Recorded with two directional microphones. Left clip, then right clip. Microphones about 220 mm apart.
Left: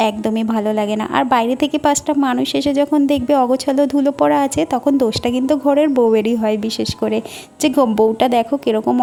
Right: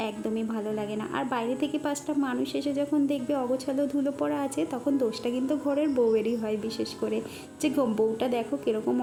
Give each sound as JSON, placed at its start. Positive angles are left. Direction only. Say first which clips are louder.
{"t": 0.0, "sound": "a woman's voice", "louder": "left 14 dB", "side_deg": 45}
{"t": 7.6, "sound": "a woman's voice", "louder": "left 12 dB", "side_deg": 40}